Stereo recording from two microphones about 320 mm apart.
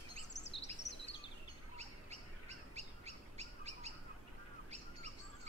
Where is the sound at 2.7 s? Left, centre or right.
Centre.